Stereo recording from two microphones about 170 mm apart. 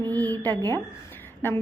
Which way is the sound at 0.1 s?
10° left (ahead or behind).